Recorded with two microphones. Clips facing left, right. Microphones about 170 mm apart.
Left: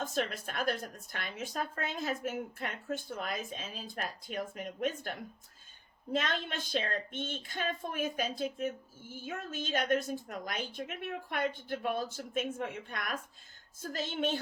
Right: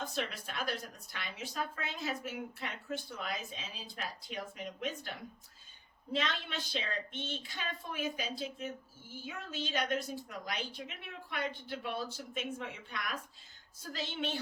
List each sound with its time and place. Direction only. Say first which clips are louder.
0.0 s a woman's voice: left 4 dB; 50° left (ahead or behind)